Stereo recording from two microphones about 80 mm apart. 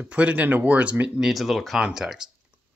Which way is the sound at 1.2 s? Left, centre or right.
Centre.